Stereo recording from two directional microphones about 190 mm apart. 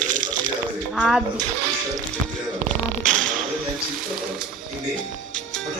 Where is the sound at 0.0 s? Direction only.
40° right (ahead or behind).